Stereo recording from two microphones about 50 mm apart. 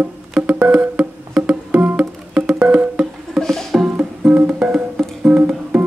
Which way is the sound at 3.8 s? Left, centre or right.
Right.